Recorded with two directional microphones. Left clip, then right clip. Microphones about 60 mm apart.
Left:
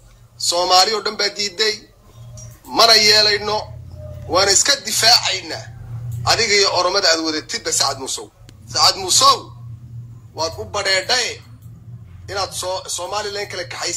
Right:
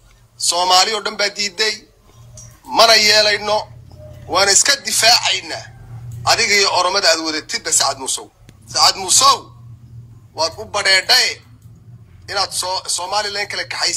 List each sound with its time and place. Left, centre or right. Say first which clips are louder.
0.4 s a man's voice: right 1 dB; right